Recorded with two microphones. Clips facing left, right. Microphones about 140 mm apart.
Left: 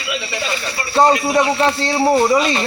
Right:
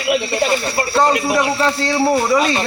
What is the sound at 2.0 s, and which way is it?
Speech, centre (ahead or behind).